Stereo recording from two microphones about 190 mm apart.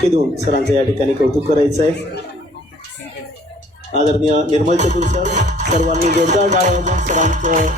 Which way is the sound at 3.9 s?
40° right (ahead or behind).